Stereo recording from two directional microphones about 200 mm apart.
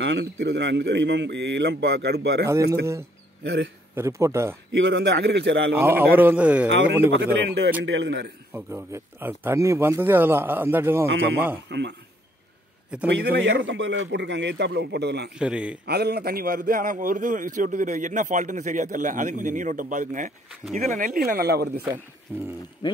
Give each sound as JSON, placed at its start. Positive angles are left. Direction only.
{"t": 0.0, "sound": "a man's voice", "side_deg": -60}
{"t": 3.9, "sound": "speech", "side_deg": -15}
{"t": 4.7, "sound": "a man's voice", "side_deg": -60}
{"t": 5.8, "sound": "speech", "side_deg": -10}
{"t": 6.7, "sound": "a man's voice", "side_deg": -65}
{"t": 8.5, "sound": "speech", "side_deg": -10}
{"t": 13.1, "sound": "a man's voice", "side_deg": -55}
{"t": 15.3, "sound": "a man's voice", "side_deg": -5}
{"t": 15.8, "sound": "a man's voice", "side_deg": -50}
{"t": 22.3, "sound": "speech", "side_deg": -10}